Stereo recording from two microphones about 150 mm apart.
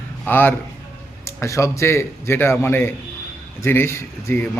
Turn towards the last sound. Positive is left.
turn(degrees=15)  # may be behind; listen again after turning